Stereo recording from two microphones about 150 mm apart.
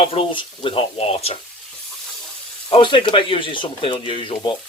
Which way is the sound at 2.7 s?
35° left (ahead or behind).